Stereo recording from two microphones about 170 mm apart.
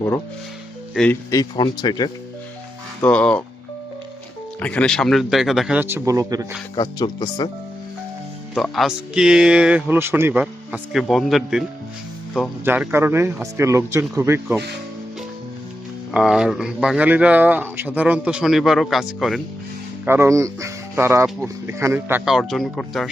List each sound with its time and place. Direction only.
0.9 s speech: 10° left (ahead or behind)
1.3 s speech: 25° left (ahead or behind)
3.0 s speech: 5° left (ahead or behind)
4.6 s speech: 5° left (ahead or behind); by 6.5 s 20° right (ahead or behind)
6.7 s speech: 25° left (ahead or behind)
8.5 s speech: centre (ahead or behind)
12.6 s speech: 10° right (ahead or behind)
16.1 s speech: 5° right (ahead or behind)
20.1 s speech: 15° right (ahead or behind); by 23.0 s centre (ahead or behind)